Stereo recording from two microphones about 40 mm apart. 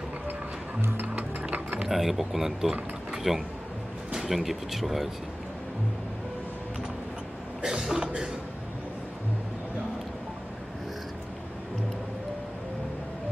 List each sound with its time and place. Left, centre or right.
1.5 s mechanisms: right
1.9 s speech: centre
4.1 s music: centre
4.4 s speech: centre
7.8 s cough: centre